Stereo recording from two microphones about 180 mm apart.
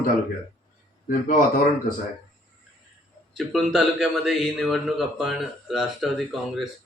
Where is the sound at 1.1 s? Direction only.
45° left (ahead or behind).